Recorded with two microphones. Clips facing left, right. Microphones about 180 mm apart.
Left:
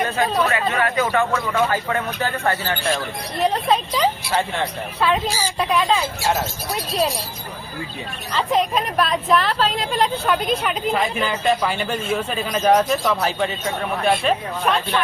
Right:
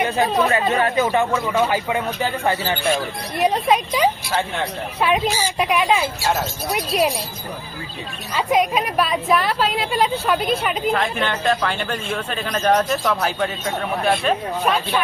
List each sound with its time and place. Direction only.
0.0 s speech: 15° right (ahead or behind)
0.5 s speech: 25° right (ahead or behind)
8.3 s a woman's voice: 10° right (ahead or behind)